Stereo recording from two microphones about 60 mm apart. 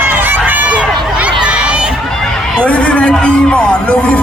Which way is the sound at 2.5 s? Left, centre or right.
Centre.